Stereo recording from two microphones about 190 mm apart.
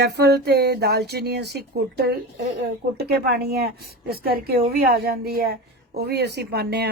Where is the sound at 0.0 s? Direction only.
60° right (ahead or behind).